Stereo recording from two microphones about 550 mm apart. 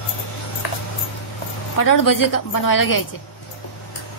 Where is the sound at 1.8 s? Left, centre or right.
Left.